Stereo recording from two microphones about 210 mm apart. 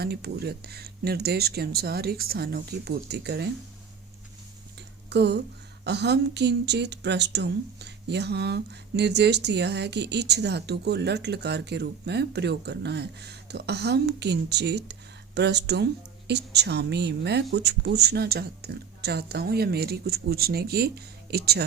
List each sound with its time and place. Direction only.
0.0 s speech: 50° right (ahead or behind)
5.0 s speech: 55° right (ahead or behind)